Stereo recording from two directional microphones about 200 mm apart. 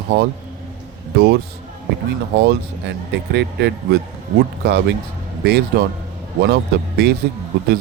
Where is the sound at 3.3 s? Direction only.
60° right (ahead or behind).